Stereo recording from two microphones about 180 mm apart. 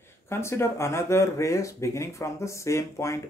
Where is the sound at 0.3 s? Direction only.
15° left (ahead or behind).